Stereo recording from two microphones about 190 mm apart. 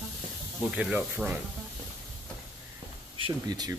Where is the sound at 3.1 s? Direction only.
30° right (ahead or behind).